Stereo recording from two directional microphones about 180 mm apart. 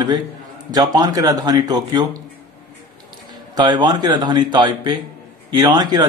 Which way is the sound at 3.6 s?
25° right (ahead or behind).